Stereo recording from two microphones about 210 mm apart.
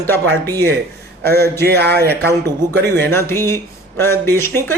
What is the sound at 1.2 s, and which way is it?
Speech, 50° right (ahead or behind).